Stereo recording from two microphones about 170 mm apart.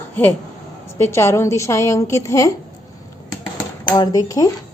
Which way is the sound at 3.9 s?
20° left (ahead or behind).